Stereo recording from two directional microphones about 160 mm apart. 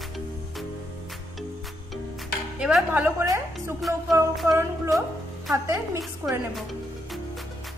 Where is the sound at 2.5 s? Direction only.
5° right (ahead or behind).